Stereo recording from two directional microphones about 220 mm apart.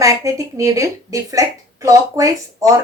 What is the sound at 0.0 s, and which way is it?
Speech, 15° right (ahead or behind).